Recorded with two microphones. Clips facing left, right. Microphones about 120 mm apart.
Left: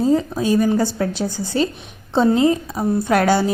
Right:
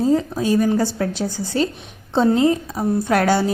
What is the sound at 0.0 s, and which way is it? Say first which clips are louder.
Speech: left 1 dB; 15° left (ahead or behind).